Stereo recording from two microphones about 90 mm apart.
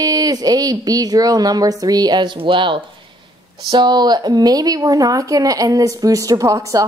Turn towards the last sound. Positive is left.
turn(degrees=-40)  # may be behind; listen again after turning